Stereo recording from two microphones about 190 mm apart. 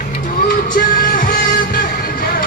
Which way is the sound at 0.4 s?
50° left (ahead or behind).